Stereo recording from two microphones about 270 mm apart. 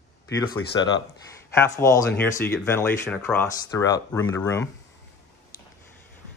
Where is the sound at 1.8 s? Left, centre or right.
Centre.